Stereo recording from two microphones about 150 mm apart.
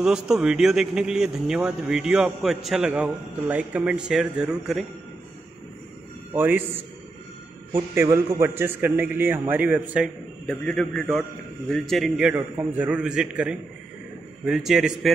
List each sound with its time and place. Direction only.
0.0 s a man's voice: 5° right (ahead or behind)
6.3 s a man's voice: 10° right (ahead or behind)
7.7 s a man's voice: 15° right (ahead or behind)
10.4 s a man's voice: 5° left (ahead or behind)